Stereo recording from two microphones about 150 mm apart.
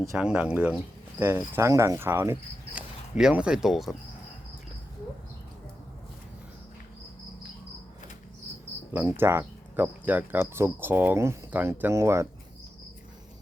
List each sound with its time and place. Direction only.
0.1 s speech: 5° right (ahead or behind)
8.9 s speech: 15° right (ahead or behind)